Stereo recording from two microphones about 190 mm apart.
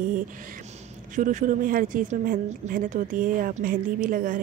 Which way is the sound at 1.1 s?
45° right (ahead or behind).